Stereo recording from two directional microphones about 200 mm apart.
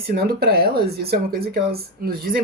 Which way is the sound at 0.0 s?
50° right (ahead or behind).